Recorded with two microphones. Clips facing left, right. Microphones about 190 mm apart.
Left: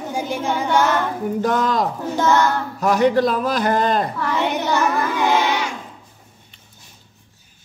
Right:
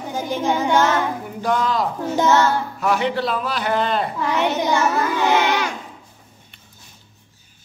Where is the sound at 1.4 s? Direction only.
45° left (ahead or behind).